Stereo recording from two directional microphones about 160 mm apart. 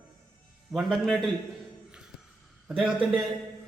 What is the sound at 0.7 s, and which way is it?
Speech, centre (ahead or behind).